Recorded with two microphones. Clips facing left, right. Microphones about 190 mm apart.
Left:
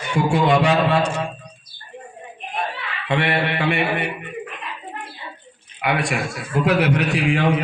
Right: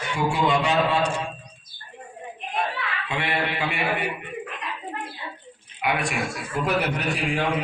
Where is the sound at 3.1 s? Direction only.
65° left (ahead or behind).